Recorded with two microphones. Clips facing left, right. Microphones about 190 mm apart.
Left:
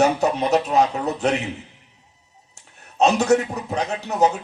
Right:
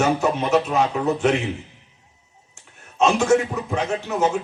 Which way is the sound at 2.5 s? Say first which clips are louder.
Right 1 dB; 40° left (ahead or behind).